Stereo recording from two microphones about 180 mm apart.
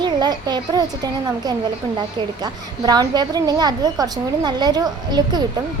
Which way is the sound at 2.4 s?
20° right (ahead or behind).